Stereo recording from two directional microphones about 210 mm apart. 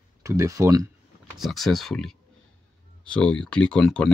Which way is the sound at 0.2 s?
15° right (ahead or behind).